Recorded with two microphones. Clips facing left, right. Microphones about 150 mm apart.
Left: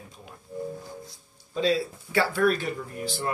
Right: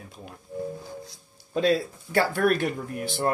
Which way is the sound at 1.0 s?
70° right (ahead or behind).